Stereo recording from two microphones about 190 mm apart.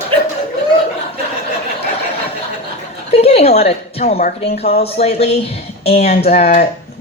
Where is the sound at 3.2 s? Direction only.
30° left (ahead or behind).